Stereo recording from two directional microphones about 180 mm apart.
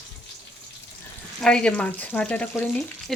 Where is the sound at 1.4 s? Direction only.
5° left (ahead or behind).